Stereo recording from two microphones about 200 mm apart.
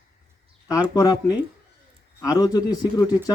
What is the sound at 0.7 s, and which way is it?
Speech, 20° left (ahead or behind).